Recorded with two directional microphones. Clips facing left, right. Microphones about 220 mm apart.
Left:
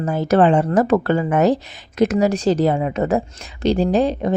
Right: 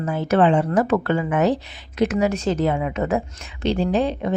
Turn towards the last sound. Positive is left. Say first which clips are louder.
# left 3 dB
turn(degrees=40)  # may be behind; listen again after turning